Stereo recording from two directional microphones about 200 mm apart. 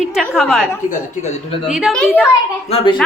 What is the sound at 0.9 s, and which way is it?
Speech, 30° left (ahead or behind).